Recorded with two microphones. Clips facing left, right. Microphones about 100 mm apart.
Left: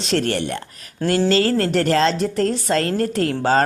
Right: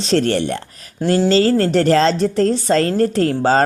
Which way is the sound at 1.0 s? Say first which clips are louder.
Right 3 dB; 25° right (ahead or behind).